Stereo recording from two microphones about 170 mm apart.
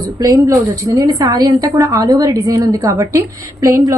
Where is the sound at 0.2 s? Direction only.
20° right (ahead or behind).